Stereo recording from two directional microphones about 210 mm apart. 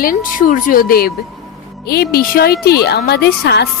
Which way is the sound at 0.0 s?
40° left (ahead or behind).